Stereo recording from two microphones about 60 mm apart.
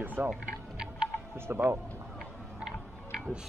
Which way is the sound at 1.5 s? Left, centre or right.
Right.